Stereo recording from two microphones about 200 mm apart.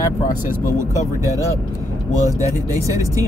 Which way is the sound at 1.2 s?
15° right (ahead or behind).